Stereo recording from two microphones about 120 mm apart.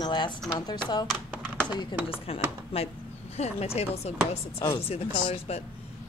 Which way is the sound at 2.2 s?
55° left (ahead or behind).